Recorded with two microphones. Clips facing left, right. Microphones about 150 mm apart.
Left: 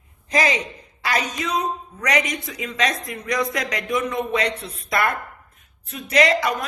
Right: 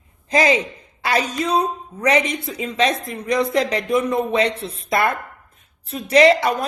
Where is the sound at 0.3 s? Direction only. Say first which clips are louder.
Right 4 dB; 30° right (ahead or behind).